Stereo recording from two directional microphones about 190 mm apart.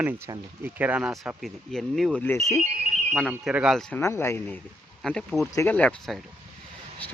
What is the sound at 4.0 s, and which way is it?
Speech, 15° left (ahead or behind).